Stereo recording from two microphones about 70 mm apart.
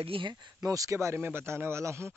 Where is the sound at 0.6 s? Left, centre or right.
Right.